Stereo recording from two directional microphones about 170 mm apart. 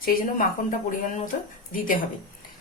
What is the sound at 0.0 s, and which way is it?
A woman's voice, 60° left (ahead or behind).